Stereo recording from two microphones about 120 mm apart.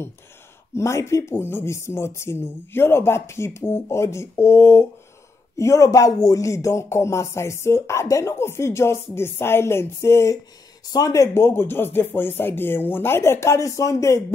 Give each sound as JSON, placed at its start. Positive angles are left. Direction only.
{"t": 0.7, "sound": "speech", "side_deg": 25}